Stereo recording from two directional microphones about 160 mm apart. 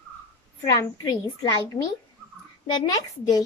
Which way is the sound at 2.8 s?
25° left (ahead or behind).